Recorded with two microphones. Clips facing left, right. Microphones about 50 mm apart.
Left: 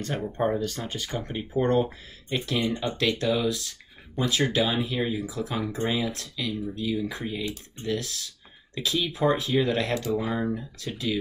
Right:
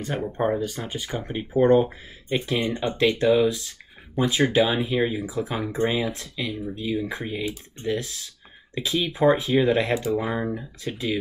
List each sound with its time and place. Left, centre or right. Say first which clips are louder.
0.0 s speech: right 2 dB; centre